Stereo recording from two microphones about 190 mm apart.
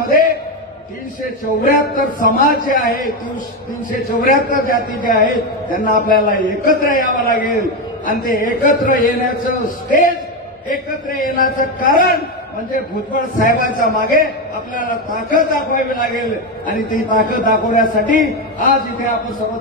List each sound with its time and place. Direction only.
1.4 s a man's voice: 45° left (ahead or behind)